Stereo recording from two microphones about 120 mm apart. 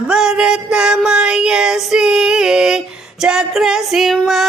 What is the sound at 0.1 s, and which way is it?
Music, 5° right (ahead or behind).